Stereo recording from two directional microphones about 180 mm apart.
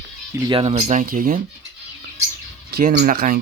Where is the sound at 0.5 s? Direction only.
35° right (ahead or behind).